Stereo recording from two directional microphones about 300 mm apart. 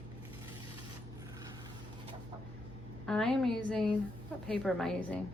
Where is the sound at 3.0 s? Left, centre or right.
Centre.